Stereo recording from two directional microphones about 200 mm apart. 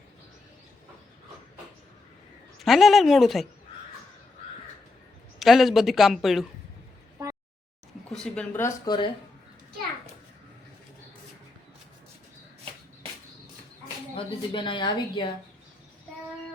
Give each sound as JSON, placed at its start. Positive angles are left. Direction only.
{"t": 2.6, "sound": "a woman's voice", "side_deg": 0}
{"t": 5.4, "sound": "a woman's voice", "side_deg": 0}
{"t": 8.1, "sound": "speech", "side_deg": 5}
{"t": 14.2, "sound": "speech", "side_deg": 25}